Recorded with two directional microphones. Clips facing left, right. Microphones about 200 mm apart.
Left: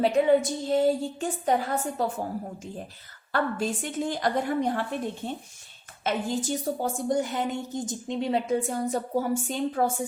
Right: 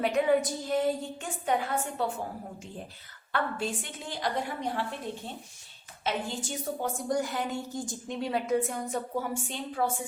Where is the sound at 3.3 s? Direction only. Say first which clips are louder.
Left 4 dB; 40° left (ahead or behind).